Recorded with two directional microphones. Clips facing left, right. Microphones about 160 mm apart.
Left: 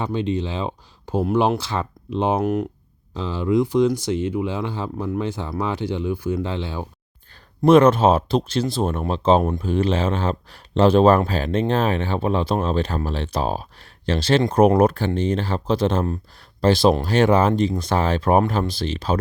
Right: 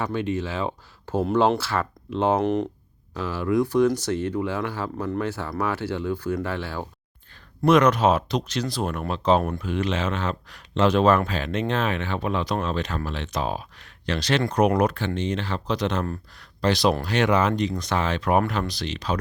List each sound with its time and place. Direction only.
0.0 s speech: 20° left (ahead or behind)
2.4 s speech: centre (ahead or behind)
3.2 s speech: 20° left (ahead or behind)
7.6 s speech: 30° left (ahead or behind)